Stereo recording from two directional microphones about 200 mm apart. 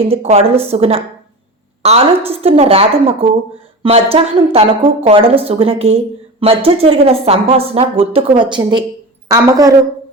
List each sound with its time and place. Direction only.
0.0 s a woman's voice: 30° right (ahead or behind)